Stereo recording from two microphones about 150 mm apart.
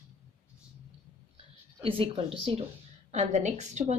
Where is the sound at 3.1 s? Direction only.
50° right (ahead or behind).